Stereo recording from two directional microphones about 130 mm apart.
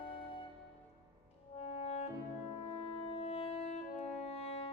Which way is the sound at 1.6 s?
55° left (ahead or behind).